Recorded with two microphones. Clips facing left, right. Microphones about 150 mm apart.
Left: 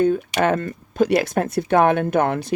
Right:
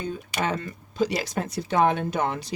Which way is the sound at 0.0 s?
60° left (ahead or behind).